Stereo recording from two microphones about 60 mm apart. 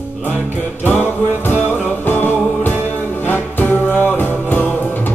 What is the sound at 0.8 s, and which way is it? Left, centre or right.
Music, left.